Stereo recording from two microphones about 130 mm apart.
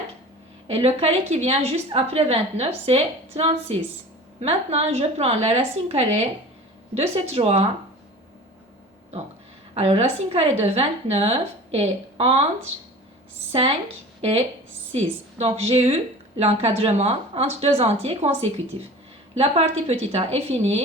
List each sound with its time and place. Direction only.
0.7 s a woman's voice: 50° right (ahead or behind)
9.7 s a woman's voice: 55° right (ahead or behind)
13.5 s a woman's voice: 50° right (ahead or behind)